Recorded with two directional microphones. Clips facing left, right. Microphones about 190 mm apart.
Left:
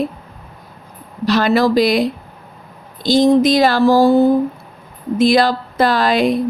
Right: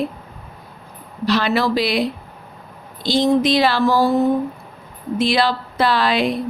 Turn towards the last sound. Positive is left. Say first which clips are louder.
# left 3 dB
turn(degrees=45)  # may be behind; listen again after turning